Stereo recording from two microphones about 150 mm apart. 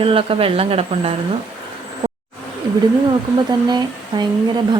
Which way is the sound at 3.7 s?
30° right (ahead or behind).